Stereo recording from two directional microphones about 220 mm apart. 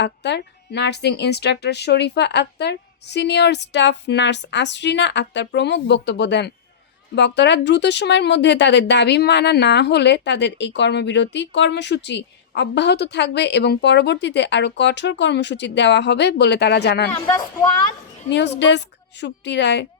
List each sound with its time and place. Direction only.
0.0 s speech: 50° left (ahead or behind)
17.1 s a woman's voice: 10° left (ahead or behind)
18.3 s speech: 50° left (ahead or behind)